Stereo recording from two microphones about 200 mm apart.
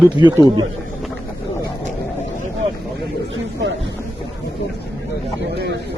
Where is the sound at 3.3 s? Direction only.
60° right (ahead or behind).